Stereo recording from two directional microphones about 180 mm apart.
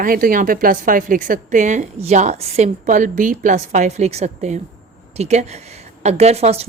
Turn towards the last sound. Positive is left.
turn(degrees=-35)  # may be behind; listen again after turning